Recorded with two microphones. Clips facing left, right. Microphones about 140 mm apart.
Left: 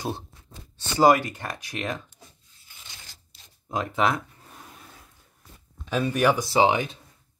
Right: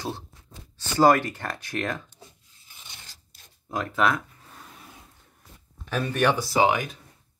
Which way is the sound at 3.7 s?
20° left (ahead or behind).